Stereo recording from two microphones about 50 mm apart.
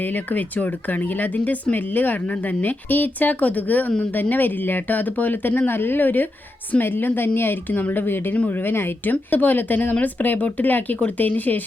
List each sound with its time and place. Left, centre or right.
0.0 s a woman's voice: left